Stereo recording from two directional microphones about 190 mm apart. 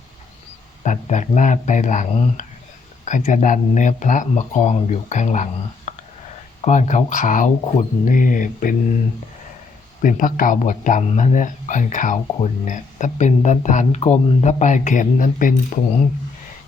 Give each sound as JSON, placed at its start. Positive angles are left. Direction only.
{"t": 0.9, "sound": "speech", "side_deg": 40}
{"t": 10.0, "sound": "speech", "side_deg": 45}